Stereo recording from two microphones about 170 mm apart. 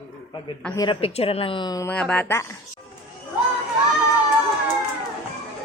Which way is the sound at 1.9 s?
5° left (ahead or behind).